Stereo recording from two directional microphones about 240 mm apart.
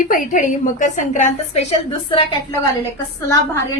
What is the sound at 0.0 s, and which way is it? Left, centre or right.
A woman's voice, left.